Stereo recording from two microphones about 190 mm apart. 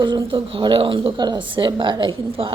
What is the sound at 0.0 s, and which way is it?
A woman's voice, 25° right (ahead or behind).